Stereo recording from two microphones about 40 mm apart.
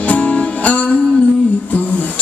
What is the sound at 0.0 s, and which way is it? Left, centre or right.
Music, left.